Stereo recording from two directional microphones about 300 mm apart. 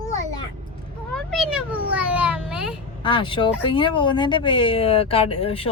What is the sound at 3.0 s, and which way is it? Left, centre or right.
Speech, centre.